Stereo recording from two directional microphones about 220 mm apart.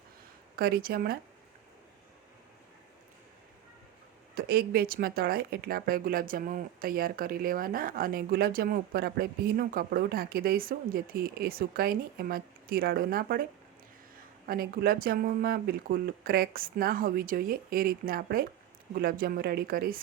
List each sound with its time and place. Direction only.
0.5 s speech: 45° right (ahead or behind)
4.4 s speech: 45° right (ahead or behind)